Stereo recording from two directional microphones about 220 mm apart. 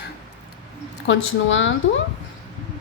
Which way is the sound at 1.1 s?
60° left (ahead or behind).